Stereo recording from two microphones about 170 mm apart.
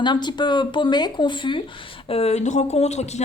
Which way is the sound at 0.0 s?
25° left (ahead or behind).